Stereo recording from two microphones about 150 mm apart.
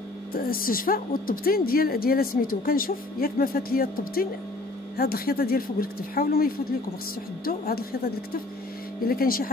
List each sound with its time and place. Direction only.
0.3 s speech: 75° left (ahead or behind)
4.9 s speech: 90° left
7.4 s speech: 90° left
9.0 s speech: 75° left (ahead or behind)